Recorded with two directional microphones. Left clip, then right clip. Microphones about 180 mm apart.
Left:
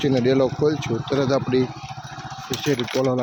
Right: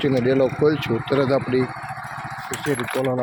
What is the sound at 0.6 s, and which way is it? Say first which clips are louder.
Speech: right 2 dB; centre (ahead or behind).